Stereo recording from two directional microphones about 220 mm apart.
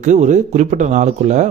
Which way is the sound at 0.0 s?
35° right (ahead or behind).